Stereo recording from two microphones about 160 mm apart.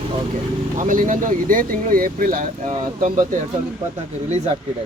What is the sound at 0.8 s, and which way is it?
Speech, 55° right (ahead or behind).